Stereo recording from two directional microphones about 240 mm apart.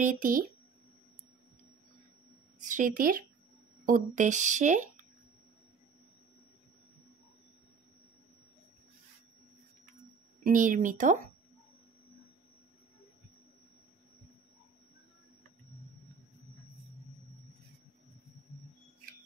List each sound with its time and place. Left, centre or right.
0.0 s speech: right
2.6 s speech: right
10.4 s speech: right